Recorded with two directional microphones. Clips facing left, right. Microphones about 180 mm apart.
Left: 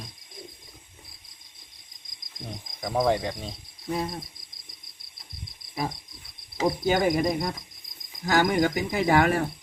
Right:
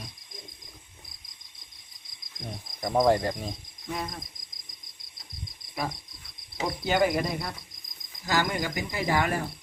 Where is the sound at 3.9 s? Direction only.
30° left (ahead or behind).